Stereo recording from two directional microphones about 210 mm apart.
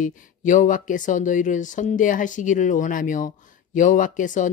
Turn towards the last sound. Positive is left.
turn(degrees=40)  # may be behind; listen again after turning